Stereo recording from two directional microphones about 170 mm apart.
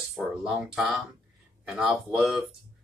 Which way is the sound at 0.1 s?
5° right (ahead or behind).